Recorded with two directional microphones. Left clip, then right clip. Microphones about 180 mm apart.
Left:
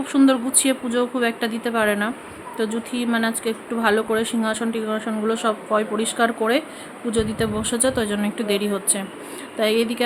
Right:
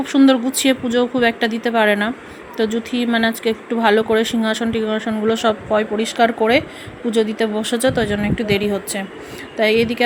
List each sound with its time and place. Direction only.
0.0 s a woman's voice: 20° right (ahead or behind)